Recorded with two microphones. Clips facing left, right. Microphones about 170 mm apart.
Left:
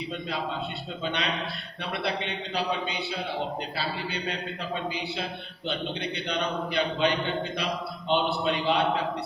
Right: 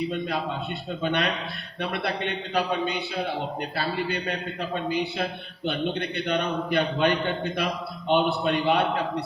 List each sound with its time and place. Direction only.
1.0 s a man's voice: 50° right (ahead or behind)